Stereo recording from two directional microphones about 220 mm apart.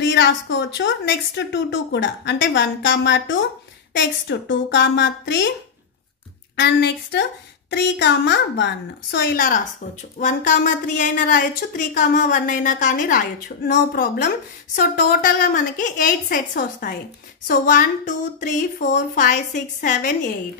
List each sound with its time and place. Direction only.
0.0 s speech: 55° left (ahead or behind)
6.6 s a woman's voice: 50° left (ahead or behind)